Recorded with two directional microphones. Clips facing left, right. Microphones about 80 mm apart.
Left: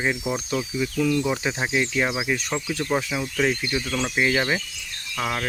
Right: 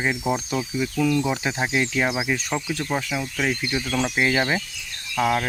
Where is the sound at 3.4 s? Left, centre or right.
Centre.